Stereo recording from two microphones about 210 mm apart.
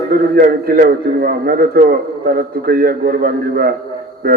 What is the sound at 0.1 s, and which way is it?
A man's voice, 45° right (ahead or behind).